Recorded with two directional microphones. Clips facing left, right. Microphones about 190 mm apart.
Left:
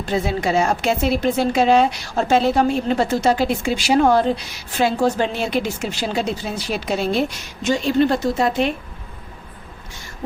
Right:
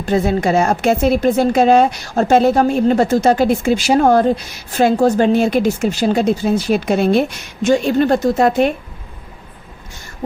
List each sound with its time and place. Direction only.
0.0 s a woman's voice: 50° right (ahead or behind)